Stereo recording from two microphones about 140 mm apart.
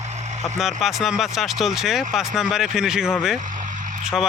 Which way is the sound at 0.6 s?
Centre (ahead or behind).